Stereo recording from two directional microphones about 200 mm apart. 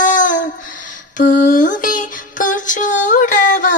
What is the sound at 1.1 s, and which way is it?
Music, 40° left (ahead or behind).